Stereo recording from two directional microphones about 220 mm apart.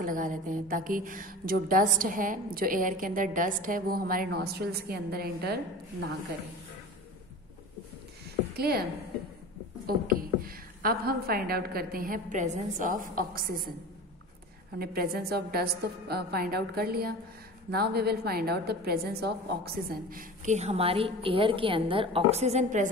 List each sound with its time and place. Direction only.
0.0 s a woman's voice: 35° right (ahead or behind)
8.5 s a woman's voice: 45° right (ahead or behind)
9.8 s a woman's voice: 40° right (ahead or behind)
14.8 s a woman's voice: 45° right (ahead or behind)